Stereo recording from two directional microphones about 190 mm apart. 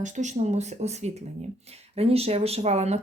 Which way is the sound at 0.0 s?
40° right (ahead or behind).